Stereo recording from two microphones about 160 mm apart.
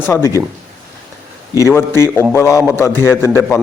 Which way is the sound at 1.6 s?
15° left (ahead or behind).